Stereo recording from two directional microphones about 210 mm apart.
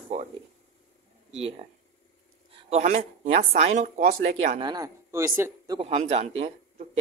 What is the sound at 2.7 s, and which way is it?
A man's voice, 35° right (ahead or behind).